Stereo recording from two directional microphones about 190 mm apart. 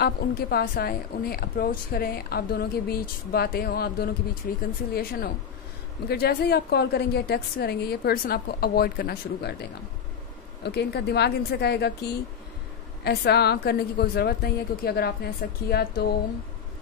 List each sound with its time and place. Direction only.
0.0 s a woman's voice: 55° left (ahead or behind)